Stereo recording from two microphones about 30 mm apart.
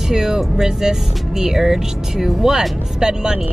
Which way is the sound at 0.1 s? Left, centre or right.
Right.